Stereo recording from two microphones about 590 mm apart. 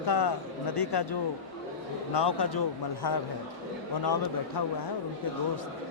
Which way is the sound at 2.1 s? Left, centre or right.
Left.